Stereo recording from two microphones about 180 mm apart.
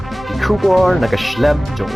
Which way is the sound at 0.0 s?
Centre (ahead or behind).